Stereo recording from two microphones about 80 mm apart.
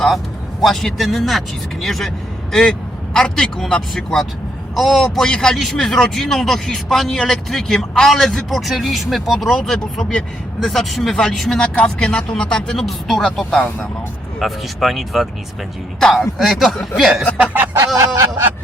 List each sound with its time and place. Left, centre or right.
0.6 s a man's voice: centre
11.7 s speech: centre
14.3 s a man's voice: centre
17.4 s music: right
17.7 s a sound: right